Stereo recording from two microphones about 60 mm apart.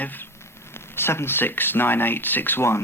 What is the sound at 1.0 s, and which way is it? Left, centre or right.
Speech, left.